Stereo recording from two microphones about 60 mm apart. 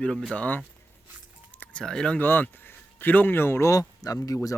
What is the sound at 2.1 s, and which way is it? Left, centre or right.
Speech, left.